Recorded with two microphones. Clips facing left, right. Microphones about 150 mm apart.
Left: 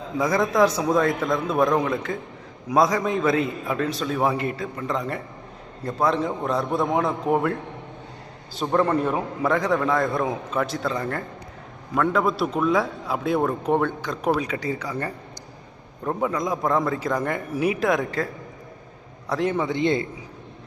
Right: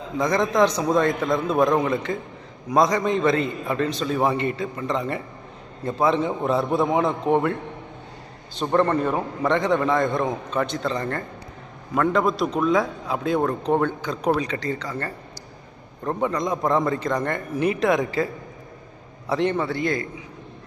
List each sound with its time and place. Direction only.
0.2 s a man's voice: 5° left (ahead or behind)
19.3 s a man's voice: centre (ahead or behind)
19.5 s a man's voice: 20° left (ahead or behind)